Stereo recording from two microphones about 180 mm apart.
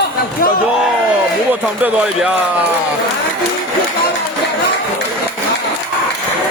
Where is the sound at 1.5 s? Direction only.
10° right (ahead or behind).